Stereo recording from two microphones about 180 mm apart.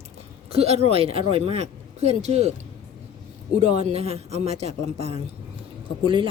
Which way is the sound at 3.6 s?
35° right (ahead or behind).